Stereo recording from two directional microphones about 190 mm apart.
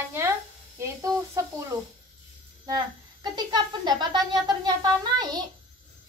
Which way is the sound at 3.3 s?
20° right (ahead or behind).